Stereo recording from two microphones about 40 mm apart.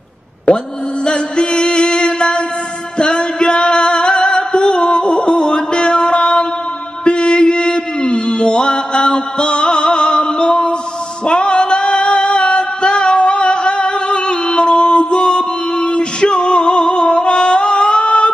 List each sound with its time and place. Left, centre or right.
0.5 s mantra: left
1.0 s music: left
7.1 s mantra: left
11.2 s music: left